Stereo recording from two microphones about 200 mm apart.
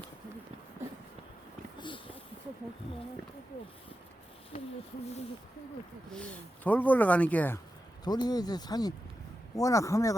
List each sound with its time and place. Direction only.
6.1 s speech: 5° left (ahead or behind)
8.0 s speech: 20° left (ahead or behind)